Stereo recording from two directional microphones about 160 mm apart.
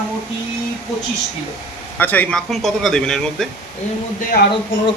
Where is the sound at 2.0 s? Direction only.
10° left (ahead or behind).